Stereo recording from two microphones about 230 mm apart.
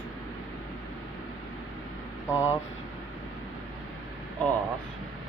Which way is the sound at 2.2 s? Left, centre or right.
Centre.